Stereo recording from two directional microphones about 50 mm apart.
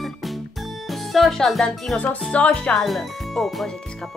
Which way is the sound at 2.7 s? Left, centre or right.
Centre.